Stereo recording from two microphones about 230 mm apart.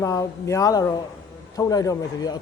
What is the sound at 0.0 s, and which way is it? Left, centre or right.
A man's voice, centre.